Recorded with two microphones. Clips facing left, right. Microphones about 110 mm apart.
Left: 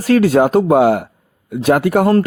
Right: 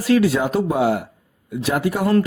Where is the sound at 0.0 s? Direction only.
50° left (ahead or behind).